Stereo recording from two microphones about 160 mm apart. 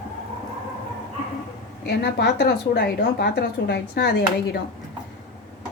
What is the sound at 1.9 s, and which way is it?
Speech, 85° left.